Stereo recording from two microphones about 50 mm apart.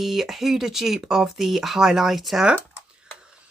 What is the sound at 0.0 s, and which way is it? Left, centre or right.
Speech, centre.